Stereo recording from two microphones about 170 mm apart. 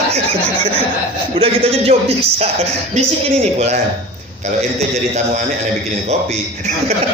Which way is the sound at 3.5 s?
40° right (ahead or behind).